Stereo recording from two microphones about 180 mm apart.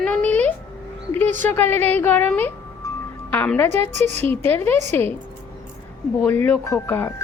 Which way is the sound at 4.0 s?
40° right (ahead or behind).